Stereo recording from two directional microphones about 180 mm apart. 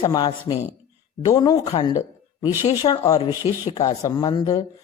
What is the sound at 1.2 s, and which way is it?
Speech, 25° left (ahead or behind).